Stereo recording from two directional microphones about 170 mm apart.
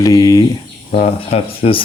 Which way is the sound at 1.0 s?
35° left (ahead or behind).